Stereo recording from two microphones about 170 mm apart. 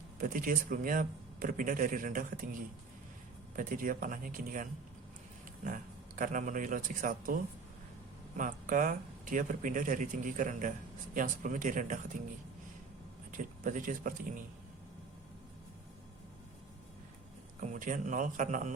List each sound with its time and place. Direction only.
0.2 s speech: 55° right (ahead or behind)
3.5 s speech: 50° right (ahead or behind)
8.4 s speech: 50° right (ahead or behind)
13.3 s speech: 50° right (ahead or behind)
17.7 s speech: 45° right (ahead or behind)